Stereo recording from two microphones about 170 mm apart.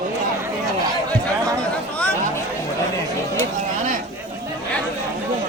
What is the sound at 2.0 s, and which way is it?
Chatter, 10° left (ahead or behind).